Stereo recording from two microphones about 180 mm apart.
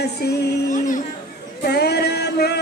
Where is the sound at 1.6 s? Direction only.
65° left (ahead or behind).